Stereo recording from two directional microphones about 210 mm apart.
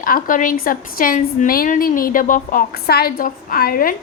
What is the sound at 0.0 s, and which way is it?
A woman's voice, 40° left (ahead or behind).